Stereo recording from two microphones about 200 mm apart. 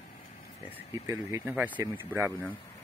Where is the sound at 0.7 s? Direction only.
10° right (ahead or behind).